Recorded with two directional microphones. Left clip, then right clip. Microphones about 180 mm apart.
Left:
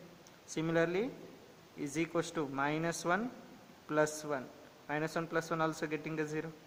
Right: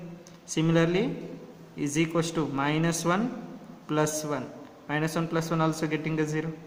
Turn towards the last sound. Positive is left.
turn(degrees=30)  # may be behind; listen again after turning